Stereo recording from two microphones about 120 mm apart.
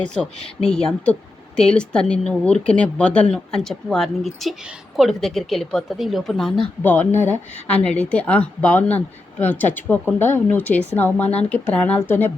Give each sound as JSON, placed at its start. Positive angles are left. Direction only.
{"t": 0.0, "sound": "speech", "side_deg": 10}
{"t": 6.8, "sound": "speech", "side_deg": 15}